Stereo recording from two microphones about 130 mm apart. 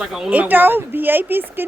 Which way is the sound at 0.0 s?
5° right (ahead or behind).